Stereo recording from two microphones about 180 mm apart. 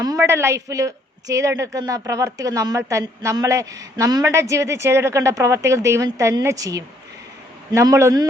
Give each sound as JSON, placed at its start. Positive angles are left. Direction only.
{"t": 0.0, "sound": "a woman's voice", "side_deg": -15}